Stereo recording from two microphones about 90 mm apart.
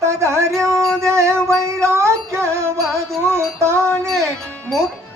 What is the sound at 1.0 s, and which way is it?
Music, 30° right (ahead or behind).